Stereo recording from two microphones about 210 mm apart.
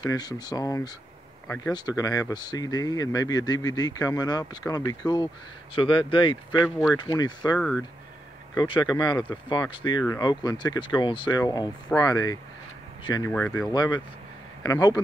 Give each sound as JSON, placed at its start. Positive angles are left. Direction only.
{"t": 0.0, "sound": "speech", "side_deg": 20}
{"t": 7.5, "sound": "speech", "side_deg": 0}
{"t": 8.5, "sound": "speech", "side_deg": 20}